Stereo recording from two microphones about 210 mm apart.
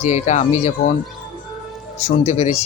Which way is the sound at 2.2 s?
30° left (ahead or behind).